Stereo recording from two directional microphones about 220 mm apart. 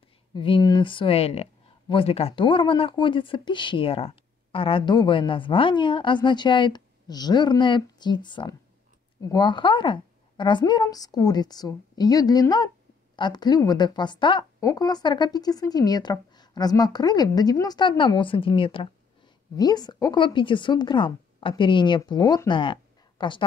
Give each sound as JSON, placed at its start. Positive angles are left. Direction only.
{"t": 0.3, "sound": "a woman's voice", "side_deg": 20}